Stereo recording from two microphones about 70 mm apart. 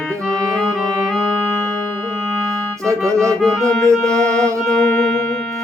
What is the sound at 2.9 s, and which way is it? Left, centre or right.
Music, right.